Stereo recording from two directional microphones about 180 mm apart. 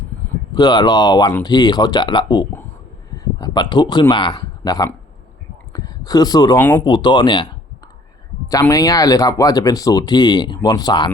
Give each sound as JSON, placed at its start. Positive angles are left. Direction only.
{"t": 0.5, "sound": "speech", "side_deg": 25}
{"t": 6.6, "sound": "speech", "side_deg": 10}
{"t": 6.8, "sound": "speech", "side_deg": 25}
{"t": 8.6, "sound": "speech", "side_deg": 20}